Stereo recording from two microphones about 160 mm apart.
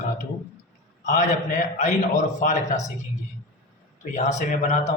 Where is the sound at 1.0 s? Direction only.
50° left (ahead or behind).